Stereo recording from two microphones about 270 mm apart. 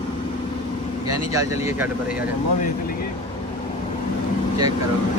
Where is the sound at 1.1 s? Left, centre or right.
Centre.